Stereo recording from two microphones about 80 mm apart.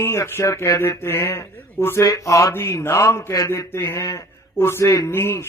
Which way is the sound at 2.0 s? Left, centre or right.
Left.